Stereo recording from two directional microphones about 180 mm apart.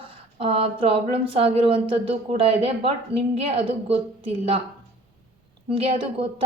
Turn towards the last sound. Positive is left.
turn(degrees=-30)  # may be behind; listen again after turning